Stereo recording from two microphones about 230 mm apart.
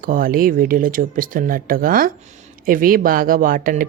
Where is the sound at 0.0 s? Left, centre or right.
Right.